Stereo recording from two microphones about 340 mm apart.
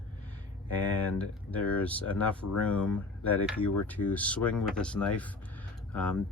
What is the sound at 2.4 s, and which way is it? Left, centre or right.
Speech, left.